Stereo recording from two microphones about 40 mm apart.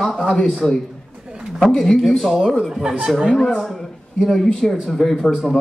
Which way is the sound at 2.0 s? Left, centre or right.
Centre.